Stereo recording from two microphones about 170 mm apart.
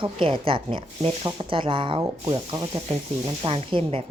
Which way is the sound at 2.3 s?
25° right (ahead or behind).